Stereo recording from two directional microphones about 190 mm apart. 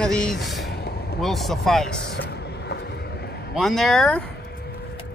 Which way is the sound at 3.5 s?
Centre (ahead or behind).